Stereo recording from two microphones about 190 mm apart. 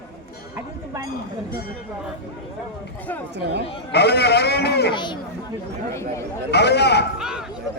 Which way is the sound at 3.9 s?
60° left (ahead or behind).